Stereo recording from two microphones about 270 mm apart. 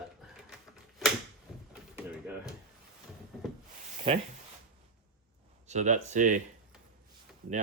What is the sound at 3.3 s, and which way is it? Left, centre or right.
Rub, centre.